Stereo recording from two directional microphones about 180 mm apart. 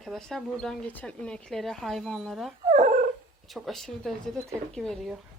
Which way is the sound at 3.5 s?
Centre (ahead or behind).